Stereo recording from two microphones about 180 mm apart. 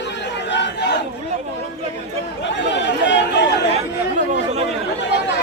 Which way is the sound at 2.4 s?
80° left.